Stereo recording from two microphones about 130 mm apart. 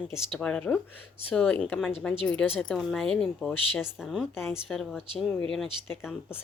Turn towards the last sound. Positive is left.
turn(degrees=5)  # may be behind; listen again after turning